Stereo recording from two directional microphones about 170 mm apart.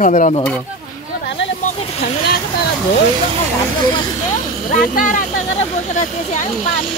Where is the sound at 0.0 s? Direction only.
45° left (ahead or behind).